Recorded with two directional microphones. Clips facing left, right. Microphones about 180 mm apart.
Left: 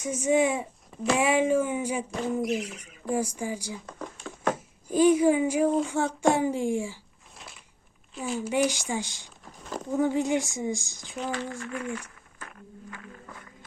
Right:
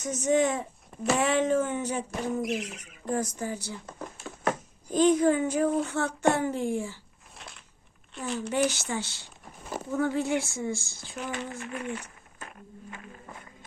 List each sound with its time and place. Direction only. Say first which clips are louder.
0.0 s speech: left 1 dB; 10° left (ahead or behind)
2.6 s speech: left 1 dB; 10° right (ahead or behind)
3.1 s a child's voice: left 2 dB; 10° left (ahead or behind)
7.3 s a sound: even; centre (ahead or behind)
8.2 s speech: left 1 dB; 10° left (ahead or behind)
9.6 s a sound: even; 5° right (ahead or behind)
9.9 s speech: left 2 dB; 15° left (ahead or behind)
11.3 s speech: left 2 dB; 20° right (ahead or behind)
12.4 s a sound: even; 25° right (ahead or behind)